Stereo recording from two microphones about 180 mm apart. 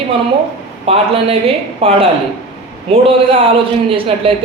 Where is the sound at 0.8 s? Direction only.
30° right (ahead or behind).